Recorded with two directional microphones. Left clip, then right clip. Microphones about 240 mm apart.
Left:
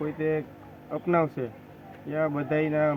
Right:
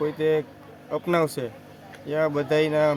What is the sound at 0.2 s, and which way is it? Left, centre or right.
Speech, right.